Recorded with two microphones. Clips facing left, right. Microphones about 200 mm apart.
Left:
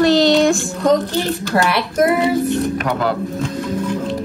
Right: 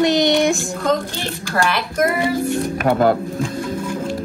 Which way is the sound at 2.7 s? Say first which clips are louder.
Right 4 dB; 45° right (ahead or behind).